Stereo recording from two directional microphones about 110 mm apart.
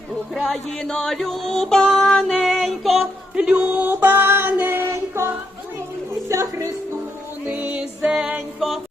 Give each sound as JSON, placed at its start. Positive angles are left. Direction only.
{"t": 0.4, "sound": "music", "side_deg": 5}
{"t": 7.4, "sound": "music", "side_deg": -15}